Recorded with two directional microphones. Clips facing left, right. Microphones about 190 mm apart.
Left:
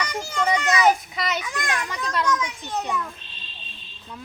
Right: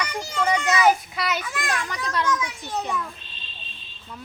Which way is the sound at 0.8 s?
Centre (ahead or behind).